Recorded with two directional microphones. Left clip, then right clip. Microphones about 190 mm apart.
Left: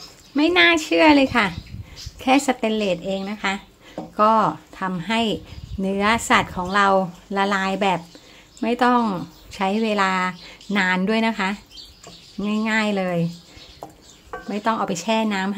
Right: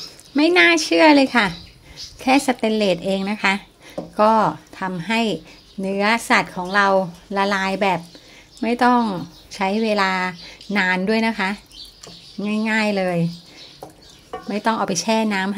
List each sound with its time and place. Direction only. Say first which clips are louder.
0.3 s speech: right 2 dB; 10° right (ahead or behind)
14.5 s speech: right 2 dB; 10° right (ahead or behind)